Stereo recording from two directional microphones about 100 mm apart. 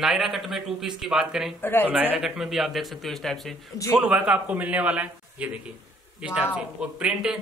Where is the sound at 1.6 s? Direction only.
20° left (ahead or behind).